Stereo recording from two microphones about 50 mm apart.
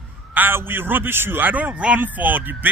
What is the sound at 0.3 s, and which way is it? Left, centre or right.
A man's voice, right.